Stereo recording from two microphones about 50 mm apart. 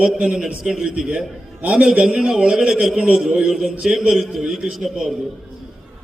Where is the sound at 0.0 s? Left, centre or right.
Centre.